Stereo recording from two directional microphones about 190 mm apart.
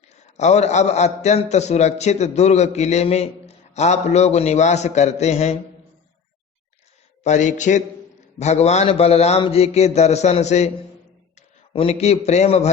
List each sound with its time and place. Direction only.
0.1 s a man's voice: 35° left (ahead or behind)
7.3 s a man's voice: 40° left (ahead or behind)